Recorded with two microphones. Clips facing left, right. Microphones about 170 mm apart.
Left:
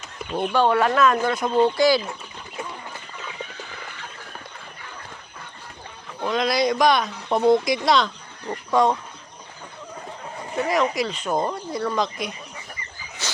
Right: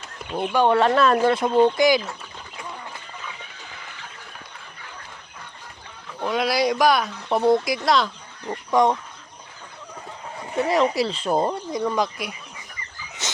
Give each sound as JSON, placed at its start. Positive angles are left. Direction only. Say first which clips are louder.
{"t": 0.3, "sound": "speech", "louder": "even", "side_deg": -10}
{"t": 0.7, "sound": "speech", "louder": "right 1 dB", "side_deg": -25}
{"t": 1.5, "sound": "speech", "louder": "even", "side_deg": -5}
{"t": 1.7, "sound": "speech", "louder": "even", "side_deg": -20}
{"t": 6.1, "sound": "speech", "louder": "even", "side_deg": -5}
{"t": 8.7, "sound": "speech", "louder": "right 1 dB", "side_deg": -20}
{"t": 10.7, "sound": "speech", "louder": "right 2 dB", "side_deg": -30}
{"t": 11.7, "sound": "speech", "louder": "right 1 dB", "side_deg": -15}
{"t": 13.2, "sound": "a sound", "louder": "even", "side_deg": -20}